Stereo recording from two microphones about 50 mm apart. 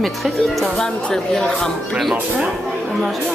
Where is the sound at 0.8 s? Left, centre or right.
Centre.